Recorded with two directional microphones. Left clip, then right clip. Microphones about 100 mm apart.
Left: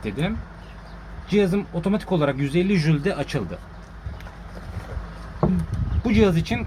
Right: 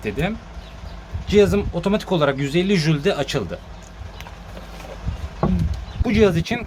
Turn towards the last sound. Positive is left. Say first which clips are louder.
# right 3 dB
turn(degrees=-45)  # may be behind; listen again after turning